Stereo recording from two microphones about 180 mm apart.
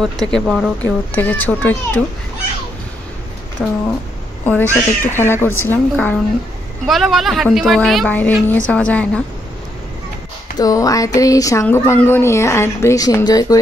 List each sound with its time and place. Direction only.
0.3 s speech: 5° left (ahead or behind)
3.6 s a woman's voice: 5° left (ahead or behind)
6.9 s a woman's voice: centre (ahead or behind)
10.6 s a sound: 20° left (ahead or behind)
11.1 s speech: 20° left (ahead or behind)